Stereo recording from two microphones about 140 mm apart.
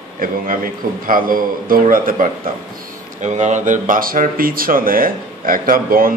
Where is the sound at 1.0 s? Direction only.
80° right.